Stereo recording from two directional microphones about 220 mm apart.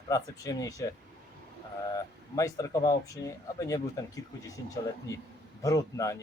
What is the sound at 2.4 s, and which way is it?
A man's voice, 15° left (ahead or behind).